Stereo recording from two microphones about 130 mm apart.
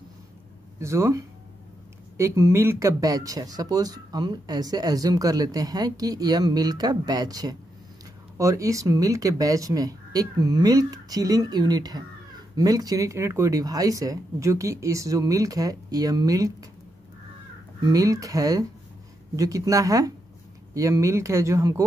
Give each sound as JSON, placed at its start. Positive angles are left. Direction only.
{"t": 0.7, "sound": "speech", "side_deg": -20}
{"t": 17.8, "sound": "speech", "side_deg": -30}